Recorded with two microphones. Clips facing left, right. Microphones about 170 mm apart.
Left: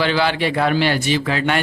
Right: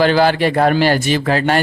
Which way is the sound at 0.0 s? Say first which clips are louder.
Right 6 dB; 45° right (ahead or behind).